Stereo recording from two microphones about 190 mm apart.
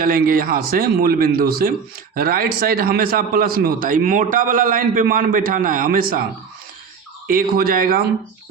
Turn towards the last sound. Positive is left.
turn(degrees=-50)  # may be behind; listen again after turning